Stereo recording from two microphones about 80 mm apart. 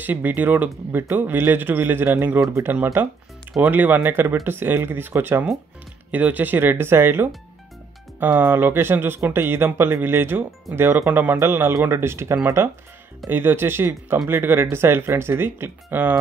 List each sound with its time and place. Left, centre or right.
0.0 s a man's voice: right